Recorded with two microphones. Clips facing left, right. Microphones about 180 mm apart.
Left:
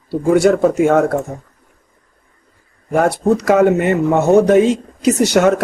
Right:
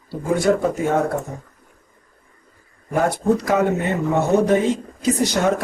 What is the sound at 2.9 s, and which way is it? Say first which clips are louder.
Speech: left 4 dB; 75° left (ahead or behind).